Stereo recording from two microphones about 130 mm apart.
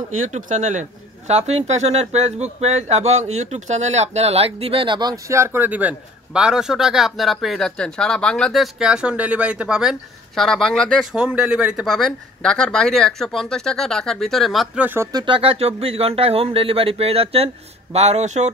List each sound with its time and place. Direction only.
0.3 s a man's voice: 70° right (ahead or behind); by 5.2 s 35° right (ahead or behind)
5.3 s a man's voice: 20° right (ahead or behind); by 11.1 s 5° left (ahead or behind)
11.1 s a man's voice: 5° right (ahead or behind)
15.1 s a man's voice: 40° right (ahead or behind); by 18.5 s 65° right (ahead or behind)